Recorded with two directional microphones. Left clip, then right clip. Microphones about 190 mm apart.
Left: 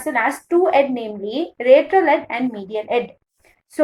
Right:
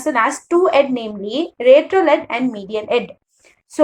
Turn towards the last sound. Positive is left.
turn(degrees=-30)  # may be behind; listen again after turning